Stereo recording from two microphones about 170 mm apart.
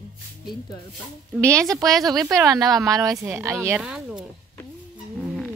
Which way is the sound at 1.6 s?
20° right (ahead or behind).